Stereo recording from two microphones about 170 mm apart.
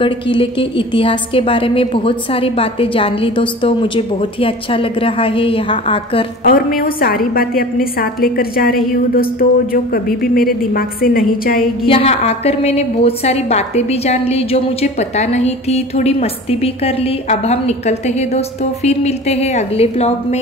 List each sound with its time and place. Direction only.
0.0 s a woman's voice: 30° left (ahead or behind)
6.4 s a woman's voice: 55° left (ahead or behind)
11.8 s a woman's voice: 35° left (ahead or behind)